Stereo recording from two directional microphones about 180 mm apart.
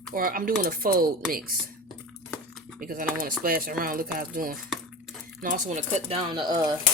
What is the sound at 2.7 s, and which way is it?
Speech, 50° right (ahead or behind).